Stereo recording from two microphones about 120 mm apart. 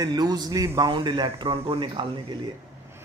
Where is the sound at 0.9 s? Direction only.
45° right (ahead or behind).